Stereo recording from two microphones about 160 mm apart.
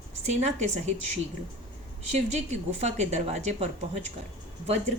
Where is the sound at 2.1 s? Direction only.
45° right (ahead or behind).